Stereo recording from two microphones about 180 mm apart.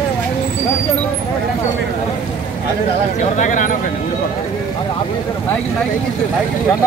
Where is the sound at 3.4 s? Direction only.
45° left (ahead or behind).